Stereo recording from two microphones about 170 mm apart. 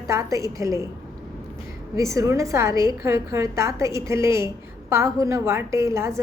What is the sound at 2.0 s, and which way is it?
A woman's voice, 20° right (ahead or behind).